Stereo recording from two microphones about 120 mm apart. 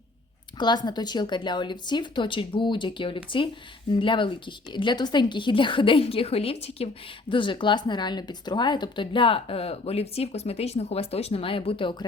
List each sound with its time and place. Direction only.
0.6 s a woman's voice: 35° left (ahead or behind)